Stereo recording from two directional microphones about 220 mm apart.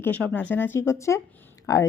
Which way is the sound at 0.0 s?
5° left (ahead or behind).